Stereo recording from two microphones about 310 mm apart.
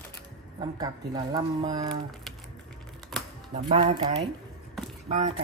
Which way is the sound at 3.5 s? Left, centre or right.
Right.